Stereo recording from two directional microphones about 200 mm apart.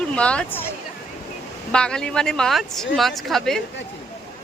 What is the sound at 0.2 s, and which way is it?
Speech, 5° left (ahead or behind).